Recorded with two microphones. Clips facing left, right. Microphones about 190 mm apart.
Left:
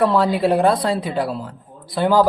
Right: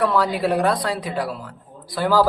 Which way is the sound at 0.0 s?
25° left (ahead or behind).